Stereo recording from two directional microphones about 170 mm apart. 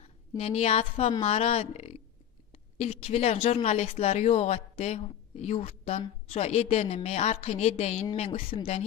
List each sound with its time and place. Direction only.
0.4 s speech: 35° left (ahead or behind)